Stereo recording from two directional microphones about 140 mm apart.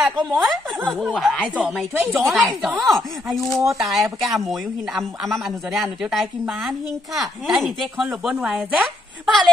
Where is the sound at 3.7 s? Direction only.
Centre (ahead or behind).